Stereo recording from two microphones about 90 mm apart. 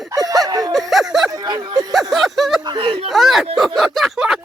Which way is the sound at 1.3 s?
50° right (ahead or behind).